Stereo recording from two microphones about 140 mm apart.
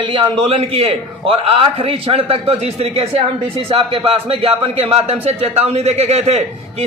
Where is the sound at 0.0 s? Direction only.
35° right (ahead or behind).